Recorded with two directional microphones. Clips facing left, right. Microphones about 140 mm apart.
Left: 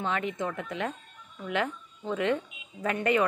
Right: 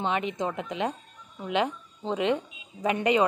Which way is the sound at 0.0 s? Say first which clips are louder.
Right 2 dB; 20° right (ahead or behind).